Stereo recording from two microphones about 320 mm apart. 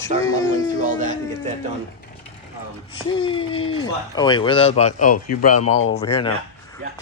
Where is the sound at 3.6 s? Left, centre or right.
Left.